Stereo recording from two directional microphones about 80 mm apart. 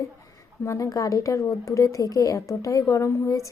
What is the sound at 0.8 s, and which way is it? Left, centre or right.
A woman's voice, left.